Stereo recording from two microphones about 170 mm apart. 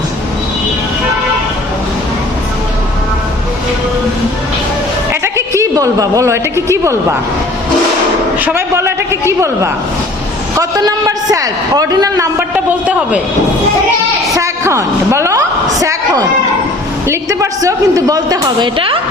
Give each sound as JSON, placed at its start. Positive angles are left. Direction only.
{"t": 5.2, "sound": "a man's voice", "side_deg": -20}
{"t": 8.4, "sound": "a man's voice", "side_deg": -10}
{"t": 10.6, "sound": "a man's voice", "side_deg": -20}
{"t": 12.5, "sound": "a man's voice", "side_deg": -10}
{"t": 14.3, "sound": "a sound", "side_deg": -15}
{"t": 17.1, "sound": "a woman's voice", "side_deg": -20}